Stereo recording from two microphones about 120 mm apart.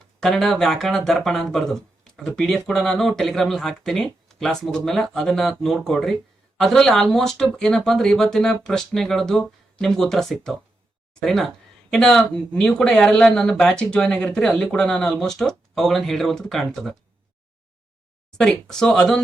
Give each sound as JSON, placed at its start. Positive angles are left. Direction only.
{"t": 0.2, "sound": "speech", "side_deg": 5}
{"t": 18.3, "sound": "speech", "side_deg": 5}